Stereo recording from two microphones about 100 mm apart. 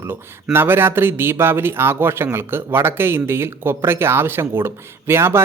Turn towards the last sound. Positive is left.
turn(degrees=-25)  # may be behind; listen again after turning